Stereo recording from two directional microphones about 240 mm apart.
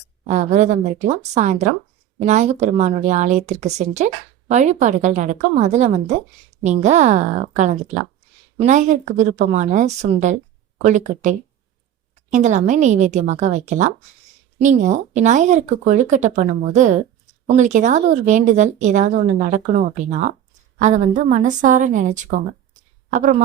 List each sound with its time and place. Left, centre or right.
0.3 s a woman's voice: right